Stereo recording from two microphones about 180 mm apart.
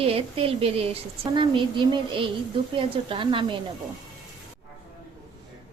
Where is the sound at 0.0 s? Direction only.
30° right (ahead or behind).